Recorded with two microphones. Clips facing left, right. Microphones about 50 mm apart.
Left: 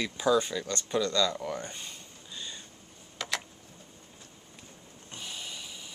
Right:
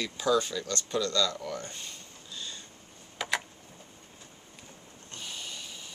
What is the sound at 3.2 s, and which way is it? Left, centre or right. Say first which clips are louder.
Tick-tock: right 3 dB; centre.